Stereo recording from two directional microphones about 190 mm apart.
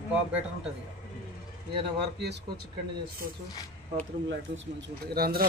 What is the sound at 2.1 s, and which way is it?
Speech, 65° right (ahead or behind).